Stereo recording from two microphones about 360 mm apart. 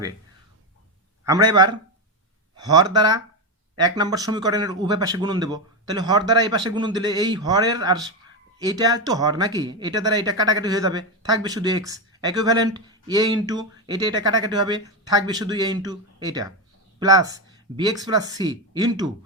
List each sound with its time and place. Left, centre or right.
1.2 s speech: centre